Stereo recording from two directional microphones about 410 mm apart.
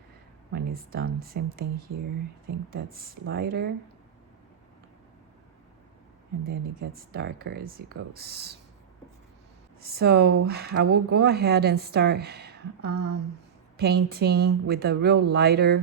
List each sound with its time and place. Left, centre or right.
0.5 s speech: right
6.5 s speech: right
9.8 s speech: right